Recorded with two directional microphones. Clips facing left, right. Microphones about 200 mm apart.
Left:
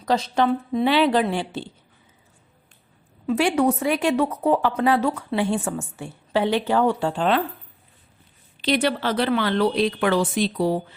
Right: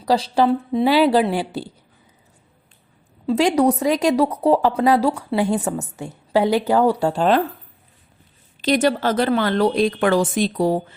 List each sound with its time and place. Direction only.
0.0 s a woman's voice: 35° right (ahead or behind)
3.2 s a woman's voice: 35° right (ahead or behind)
8.6 s a woman's voice: 45° right (ahead or behind)